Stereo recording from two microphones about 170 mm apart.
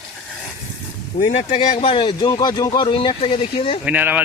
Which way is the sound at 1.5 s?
35° left (ahead or behind).